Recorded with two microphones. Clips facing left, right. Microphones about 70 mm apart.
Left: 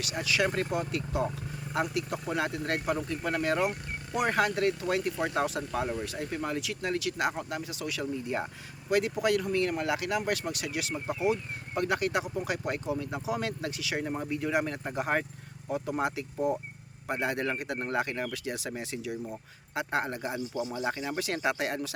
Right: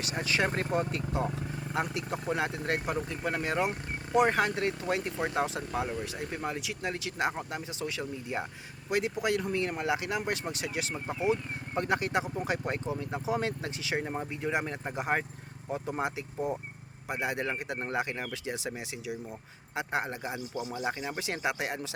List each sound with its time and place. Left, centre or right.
0.0 s speech: right